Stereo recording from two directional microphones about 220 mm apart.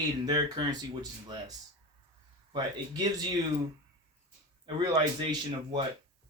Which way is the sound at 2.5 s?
20° right (ahead or behind).